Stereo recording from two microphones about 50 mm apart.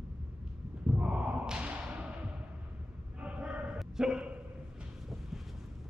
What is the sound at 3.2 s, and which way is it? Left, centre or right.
Bow-wow, right.